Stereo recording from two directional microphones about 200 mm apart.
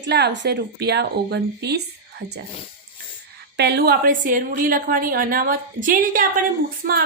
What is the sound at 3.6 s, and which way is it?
A woman's voice, 55° right (ahead or behind).